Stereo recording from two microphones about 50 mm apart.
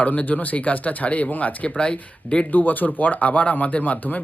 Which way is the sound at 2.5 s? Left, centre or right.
Left.